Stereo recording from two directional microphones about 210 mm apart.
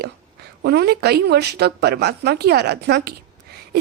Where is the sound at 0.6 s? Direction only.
50° right (ahead or behind).